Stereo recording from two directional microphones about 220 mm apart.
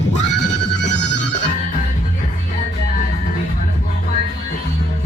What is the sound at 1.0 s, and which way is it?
Music, 50° left (ahead or behind).